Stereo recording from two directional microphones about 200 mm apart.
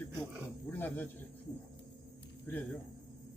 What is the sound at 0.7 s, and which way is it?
Speech, 10° left (ahead or behind).